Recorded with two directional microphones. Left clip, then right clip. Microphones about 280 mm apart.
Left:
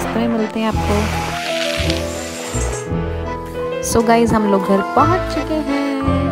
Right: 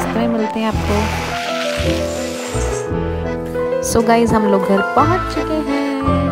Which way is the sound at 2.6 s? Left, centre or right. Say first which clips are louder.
Right 4 dB; centre.